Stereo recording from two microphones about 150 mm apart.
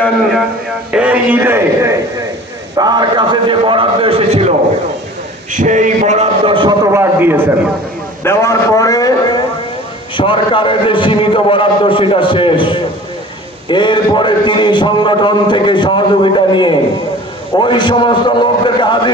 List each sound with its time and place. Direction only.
0.9 s a man's voice: 10° right (ahead or behind)
2.8 s a man's voice: 30° right (ahead or behind); by 4.6 s 45° right (ahead or behind)
5.5 s a sound: 55° right (ahead or behind); by 6.9 s 30° right (ahead or behind)
6.9 s a sound: 15° right (ahead or behind)
8.2 s a man's voice: 15° left (ahead or behind)
10.1 s a man's voice: 35° left (ahead or behind)